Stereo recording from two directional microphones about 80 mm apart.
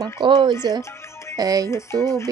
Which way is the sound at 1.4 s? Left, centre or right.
Right.